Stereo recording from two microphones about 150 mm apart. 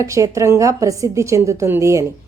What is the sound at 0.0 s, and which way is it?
A woman's voice, 20° right (ahead or behind).